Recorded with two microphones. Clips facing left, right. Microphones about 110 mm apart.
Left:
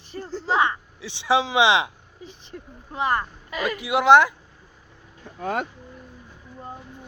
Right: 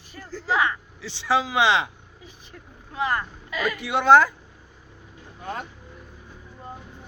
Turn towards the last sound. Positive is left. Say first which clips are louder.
# left 6 dB
turn(degrees=90)